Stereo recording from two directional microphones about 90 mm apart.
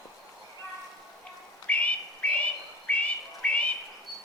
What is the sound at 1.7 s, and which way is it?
Bird, 15° left (ahead or behind).